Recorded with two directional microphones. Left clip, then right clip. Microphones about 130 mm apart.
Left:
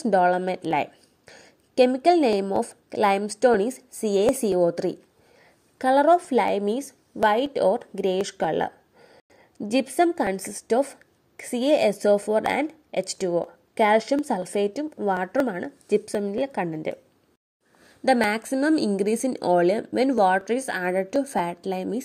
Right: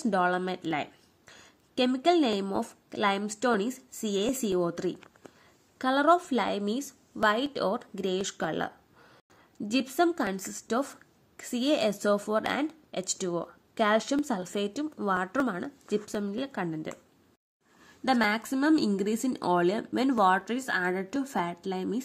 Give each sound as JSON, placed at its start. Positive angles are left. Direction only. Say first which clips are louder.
{"t": 0.0, "sound": "a woman's voice", "louder": "left 7 dB", "side_deg": 25}
{"t": 18.0, "sound": "a woman's voice", "louder": "left 5 dB", "side_deg": 25}